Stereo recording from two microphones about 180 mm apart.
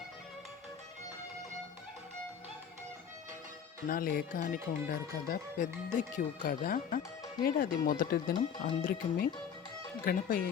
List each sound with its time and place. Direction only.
3.8 s speech: 55° left (ahead or behind)